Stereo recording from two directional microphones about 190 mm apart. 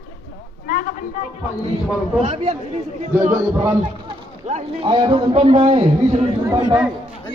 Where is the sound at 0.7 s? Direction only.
45° left (ahead or behind).